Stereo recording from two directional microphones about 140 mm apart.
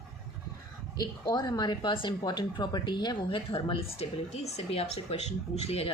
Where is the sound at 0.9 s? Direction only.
25° left (ahead or behind).